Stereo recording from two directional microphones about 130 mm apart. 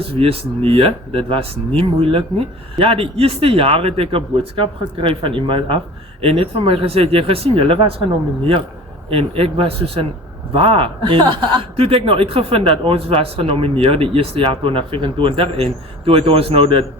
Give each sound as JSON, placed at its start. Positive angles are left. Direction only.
{"t": 0.0, "sound": "a man's voice", "side_deg": -45}
{"t": 9.0, "sound": "a man's voice", "side_deg": -45}